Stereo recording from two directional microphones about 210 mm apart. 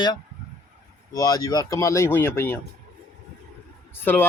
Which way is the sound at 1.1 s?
15° left (ahead or behind).